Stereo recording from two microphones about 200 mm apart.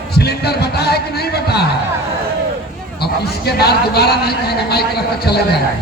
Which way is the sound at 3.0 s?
55° left (ahead or behind).